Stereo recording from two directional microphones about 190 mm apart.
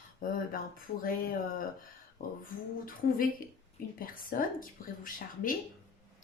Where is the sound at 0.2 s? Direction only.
45° left (ahead or behind).